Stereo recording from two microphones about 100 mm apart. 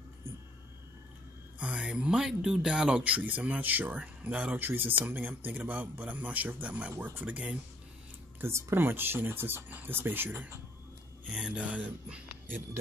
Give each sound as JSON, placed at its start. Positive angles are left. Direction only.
{"t": 1.6, "sound": "speech", "side_deg": -10}
{"t": 8.4, "sound": "speech", "side_deg": -25}
{"t": 11.3, "sound": "speech", "side_deg": -10}